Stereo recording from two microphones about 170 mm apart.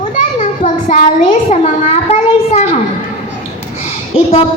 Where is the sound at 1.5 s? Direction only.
40° left (ahead or behind).